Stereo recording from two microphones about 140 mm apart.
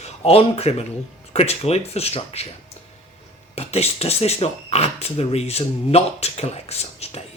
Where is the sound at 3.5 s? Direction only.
50° left (ahead or behind).